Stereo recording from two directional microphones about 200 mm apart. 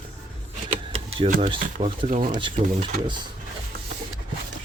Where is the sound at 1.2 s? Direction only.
40° right (ahead or behind).